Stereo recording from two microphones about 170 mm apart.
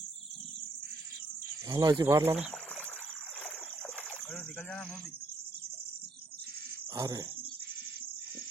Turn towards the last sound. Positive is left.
turn(degrees=-20)  # may be behind; listen again after turning